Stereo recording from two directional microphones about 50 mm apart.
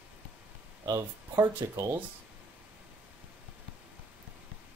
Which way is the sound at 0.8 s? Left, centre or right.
Right.